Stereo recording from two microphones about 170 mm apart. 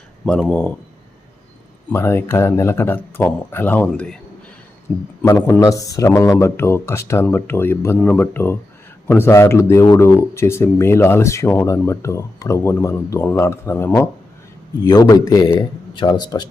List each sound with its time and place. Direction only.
0.3 s speech: 5° left (ahead or behind)
1.9 s a man's voice: 15° left (ahead or behind)